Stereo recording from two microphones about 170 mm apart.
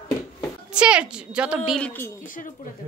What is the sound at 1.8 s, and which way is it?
Speech, 10° left (ahead or behind).